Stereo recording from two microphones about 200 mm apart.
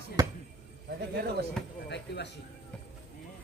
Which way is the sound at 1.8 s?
55° left (ahead or behind).